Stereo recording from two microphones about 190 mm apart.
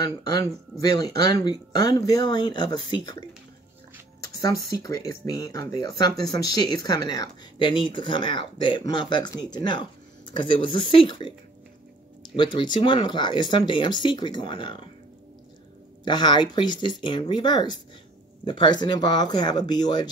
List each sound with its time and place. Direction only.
0.0 s speech: 20° left (ahead or behind)
12.4 s speech: 25° left (ahead or behind)
16.0 s speech: 25° left (ahead or behind)